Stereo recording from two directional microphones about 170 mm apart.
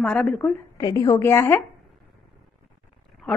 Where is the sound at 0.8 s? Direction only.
20° left (ahead or behind).